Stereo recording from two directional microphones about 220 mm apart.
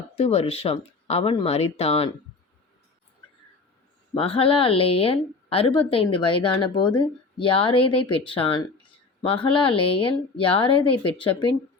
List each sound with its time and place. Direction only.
0.2 s speech: 25° left (ahead or behind)
4.1 s speech: 25° left (ahead or behind)